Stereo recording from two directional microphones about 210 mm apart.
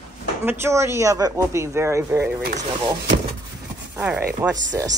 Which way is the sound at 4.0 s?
5° right (ahead or behind).